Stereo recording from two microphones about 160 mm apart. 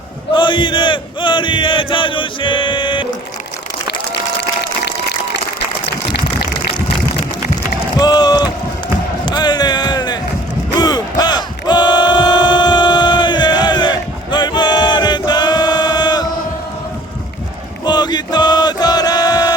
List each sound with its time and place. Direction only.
0.3 s chant: 30° left (ahead or behind)
7.9 s rowboat: 25° left (ahead or behind)
9.2 s a sound: 25° left (ahead or behind)
10.8 s battle cry: 25° left (ahead or behind)
17.8 s chant: 25° left (ahead or behind)